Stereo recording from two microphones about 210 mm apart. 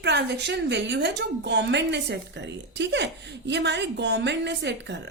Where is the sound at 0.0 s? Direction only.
55° right (ahead or behind).